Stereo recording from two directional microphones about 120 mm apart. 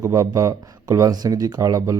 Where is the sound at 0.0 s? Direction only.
30° right (ahead or behind).